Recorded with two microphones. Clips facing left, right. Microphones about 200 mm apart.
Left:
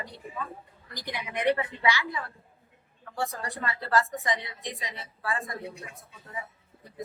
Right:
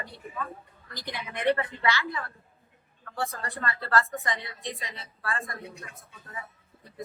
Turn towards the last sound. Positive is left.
turn(degrees=15)  # may be behind; listen again after turning